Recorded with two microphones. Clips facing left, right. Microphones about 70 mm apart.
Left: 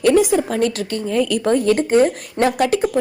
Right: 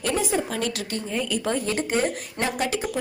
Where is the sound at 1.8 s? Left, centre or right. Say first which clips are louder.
Left 9 dB; left.